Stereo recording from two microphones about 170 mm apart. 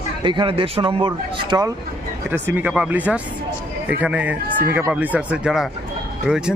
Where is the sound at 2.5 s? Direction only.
5° right (ahead or behind).